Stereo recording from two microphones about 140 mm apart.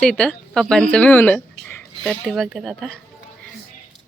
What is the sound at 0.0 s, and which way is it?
Speech, 5° left (ahead or behind).